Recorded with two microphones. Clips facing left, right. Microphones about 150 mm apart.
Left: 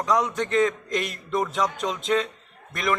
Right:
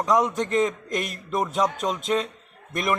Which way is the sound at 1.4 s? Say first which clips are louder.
Right 4 dB; 20° right (ahead or behind).